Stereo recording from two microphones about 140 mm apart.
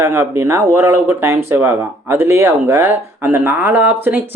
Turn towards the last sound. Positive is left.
turn(degrees=-15)  # may be behind; listen again after turning